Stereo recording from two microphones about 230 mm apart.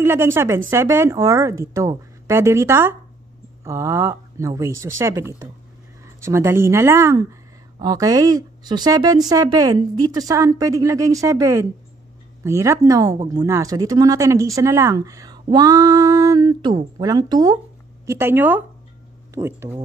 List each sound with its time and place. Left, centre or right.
0.0 s speech: centre